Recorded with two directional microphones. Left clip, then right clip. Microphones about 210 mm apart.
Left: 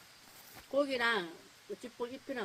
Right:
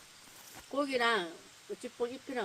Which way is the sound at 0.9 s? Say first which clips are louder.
Right 2 dB; 5° right (ahead or behind).